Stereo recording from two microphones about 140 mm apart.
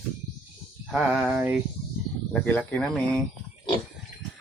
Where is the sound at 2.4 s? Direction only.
15° left (ahead or behind).